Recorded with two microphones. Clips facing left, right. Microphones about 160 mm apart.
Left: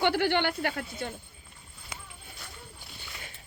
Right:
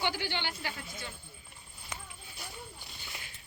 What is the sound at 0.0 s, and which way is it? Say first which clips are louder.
A woman's voice: left 9 dB; 60° left (ahead or behind).